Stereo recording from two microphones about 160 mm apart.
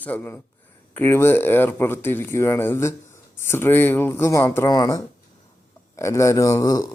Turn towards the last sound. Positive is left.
turn(degrees=25)  # may be behind; listen again after turning